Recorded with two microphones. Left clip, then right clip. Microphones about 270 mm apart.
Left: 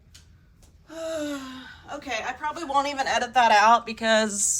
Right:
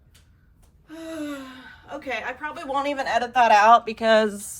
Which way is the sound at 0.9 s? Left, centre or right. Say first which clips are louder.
Left 3 dB; centre.